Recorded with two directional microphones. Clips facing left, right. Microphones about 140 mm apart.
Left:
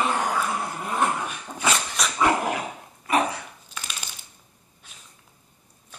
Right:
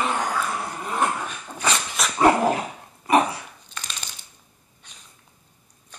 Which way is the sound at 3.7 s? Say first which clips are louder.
Even; 10° left (ahead or behind).